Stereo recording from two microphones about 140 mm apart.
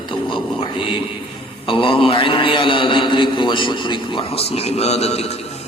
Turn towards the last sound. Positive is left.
turn(degrees=50)  # may be behind; listen again after turning